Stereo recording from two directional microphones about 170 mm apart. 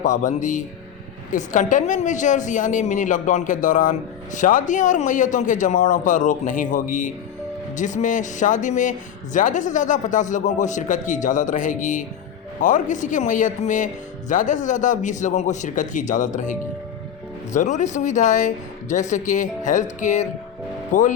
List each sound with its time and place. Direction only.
0.0 s a woman's voice: 45° left (ahead or behind)